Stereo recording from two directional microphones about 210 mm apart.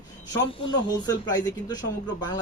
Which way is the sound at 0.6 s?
20° left (ahead or behind).